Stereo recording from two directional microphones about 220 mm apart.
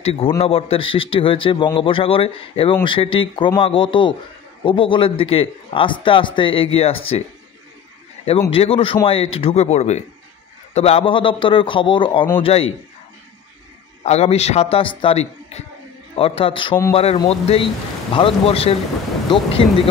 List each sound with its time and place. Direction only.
0.0 s a man's voice: 25° left (ahead or behind)
8.5 s a man's voice: 25° left (ahead or behind)
14.0 s a man's voice: 30° left (ahead or behind)
19.2 s thunder: 20° left (ahead or behind)